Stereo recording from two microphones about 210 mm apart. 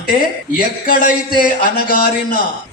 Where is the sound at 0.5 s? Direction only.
40° left (ahead or behind).